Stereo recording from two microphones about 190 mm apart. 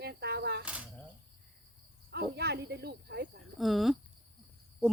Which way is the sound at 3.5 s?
Centre (ahead or behind).